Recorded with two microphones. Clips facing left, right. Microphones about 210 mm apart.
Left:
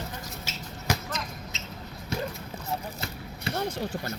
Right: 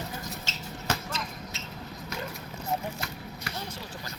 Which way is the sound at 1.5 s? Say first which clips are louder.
Even; 20° left (ahead or behind).